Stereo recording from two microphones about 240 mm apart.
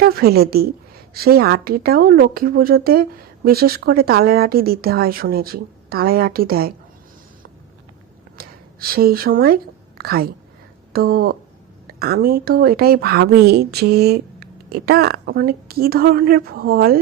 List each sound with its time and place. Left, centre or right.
0.0 s speech: right
8.4 s a woman's voice: right